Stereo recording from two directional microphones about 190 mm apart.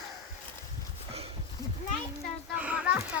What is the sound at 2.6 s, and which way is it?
Speech, 5° right (ahead or behind).